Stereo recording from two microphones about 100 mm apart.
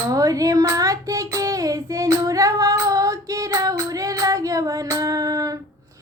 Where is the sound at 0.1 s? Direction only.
35° right (ahead or behind).